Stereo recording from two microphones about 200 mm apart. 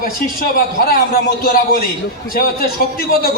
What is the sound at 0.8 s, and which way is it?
A man's voice, 50° left (ahead or behind).